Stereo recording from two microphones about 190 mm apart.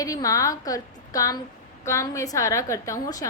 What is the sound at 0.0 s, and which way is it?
A woman's voice, 20° left (ahead or behind).